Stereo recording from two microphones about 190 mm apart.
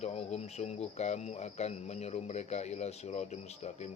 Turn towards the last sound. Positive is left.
turn(degrees=35)  # may be behind; listen again after turning